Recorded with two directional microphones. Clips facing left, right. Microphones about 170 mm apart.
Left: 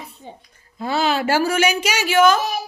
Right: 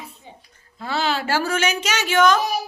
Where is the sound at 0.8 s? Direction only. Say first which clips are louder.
Left 4 dB; 15° left (ahead or behind).